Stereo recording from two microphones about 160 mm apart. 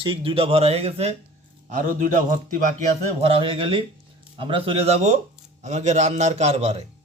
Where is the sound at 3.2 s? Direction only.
35° right (ahead or behind).